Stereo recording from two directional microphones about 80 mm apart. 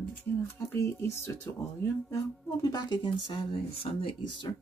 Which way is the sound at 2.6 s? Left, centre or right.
Left.